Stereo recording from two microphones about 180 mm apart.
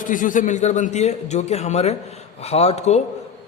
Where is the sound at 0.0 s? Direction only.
45° left (ahead or behind).